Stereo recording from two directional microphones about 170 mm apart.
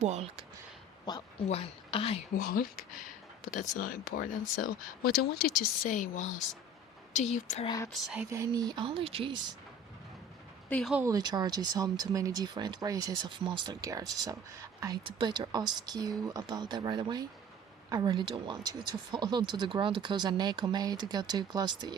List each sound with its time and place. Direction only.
0.0 s speech: 40° right (ahead or behind)
1.5 s speech: 35° left (ahead or behind)
2.4 s a woman's voice: 55° left (ahead or behind)
8.0 s speech: 5° right (ahead or behind)
8.3 s speech: 20° right (ahead or behind)
10.7 s speech: 5° left (ahead or behind)
10.9 s speech: 20° right (ahead or behind)